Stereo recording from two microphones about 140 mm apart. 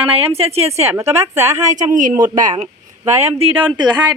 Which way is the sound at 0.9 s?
20° right (ahead or behind).